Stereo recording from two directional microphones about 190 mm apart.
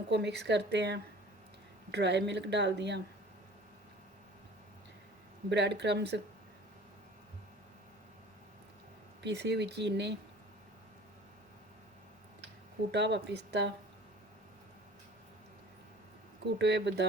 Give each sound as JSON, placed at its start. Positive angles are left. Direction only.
{"t": 0.1, "sound": "speech", "side_deg": -60}
{"t": 5.5, "sound": "speech", "side_deg": -65}
{"t": 9.2, "sound": "speech", "side_deg": -65}
{"t": 12.9, "sound": "speech", "side_deg": -65}
{"t": 16.6, "sound": "speech", "side_deg": -65}